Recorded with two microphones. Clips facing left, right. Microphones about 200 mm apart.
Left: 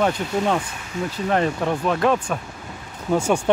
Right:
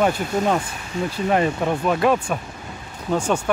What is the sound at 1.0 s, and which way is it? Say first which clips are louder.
Speech: right 2 dB; 30° right (ahead or behind).